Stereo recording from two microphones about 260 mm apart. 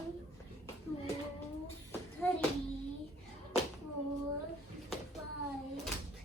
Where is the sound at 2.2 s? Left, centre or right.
Centre.